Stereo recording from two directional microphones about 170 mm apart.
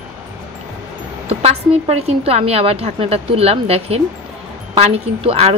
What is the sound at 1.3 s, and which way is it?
A woman's voice, 40° right (ahead or behind).